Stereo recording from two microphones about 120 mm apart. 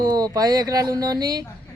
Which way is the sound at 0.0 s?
30° right (ahead or behind).